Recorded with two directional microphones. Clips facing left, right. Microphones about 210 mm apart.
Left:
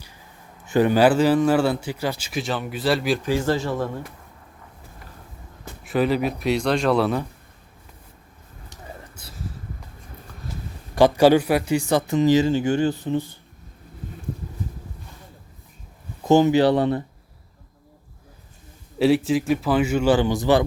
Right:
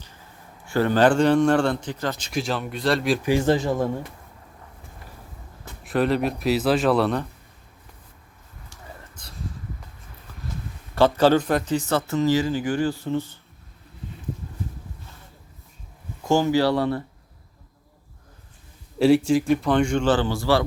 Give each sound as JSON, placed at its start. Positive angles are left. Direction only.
{"t": 0.6, "sound": "a man's voice", "side_deg": 15}
{"t": 3.2, "sound": "speech", "side_deg": -15}
{"t": 5.8, "sound": "a man's voice", "side_deg": 0}
{"t": 9.2, "sound": "a sound", "side_deg": 5}
{"t": 10.9, "sound": "a man's voice", "side_deg": 15}
{"t": 16.2, "sound": "speech", "side_deg": 20}
{"t": 18.9, "sound": "a man's voice", "side_deg": 0}